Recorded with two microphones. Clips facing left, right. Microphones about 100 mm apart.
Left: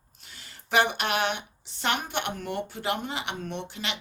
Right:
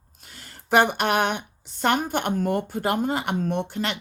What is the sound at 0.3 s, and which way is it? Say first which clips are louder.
Speech: right 7 dB; 45° right (ahead or behind).